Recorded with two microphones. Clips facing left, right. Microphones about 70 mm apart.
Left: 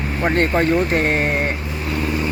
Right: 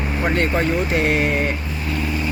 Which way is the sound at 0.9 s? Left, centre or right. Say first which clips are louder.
Even; left.